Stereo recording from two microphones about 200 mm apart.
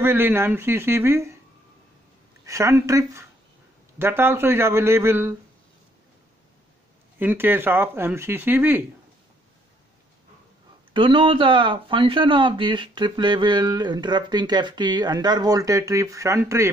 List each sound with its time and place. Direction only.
0.0 s speech: 10° right (ahead or behind)
2.4 s speech: 15° right (ahead or behind)
7.2 s speech: 10° right (ahead or behind)
10.9 s speech: 25° right (ahead or behind)